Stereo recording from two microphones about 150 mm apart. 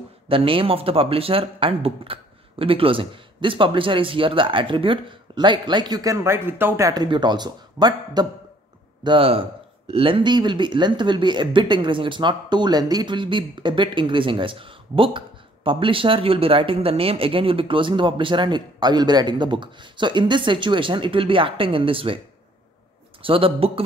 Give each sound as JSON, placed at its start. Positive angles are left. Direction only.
{"t": 0.3, "sound": "speech", "side_deg": -35}
{"t": 6.9, "sound": "speech", "side_deg": -30}
{"t": 23.2, "sound": "speech", "side_deg": -35}